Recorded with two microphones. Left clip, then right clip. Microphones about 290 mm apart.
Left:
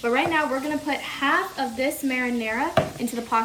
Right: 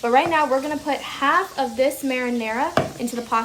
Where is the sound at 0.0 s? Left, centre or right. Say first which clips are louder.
Right 4 dB; centre.